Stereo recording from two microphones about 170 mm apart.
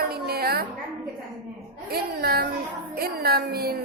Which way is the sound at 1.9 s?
65° right (ahead or behind).